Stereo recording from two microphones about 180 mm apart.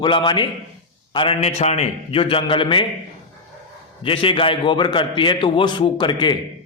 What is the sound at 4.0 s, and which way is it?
A man's voice, 30° left (ahead or behind).